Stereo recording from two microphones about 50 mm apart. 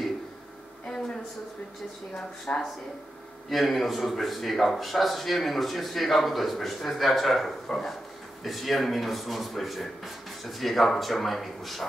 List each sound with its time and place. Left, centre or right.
2.1 s speech: centre
3.4 s speech: centre